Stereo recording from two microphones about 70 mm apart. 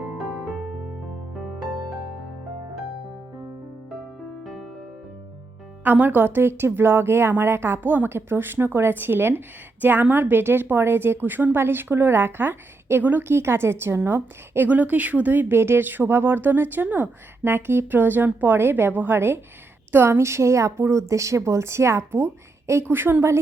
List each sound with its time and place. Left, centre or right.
4.4 s music: centre
5.8 s a woman's voice: right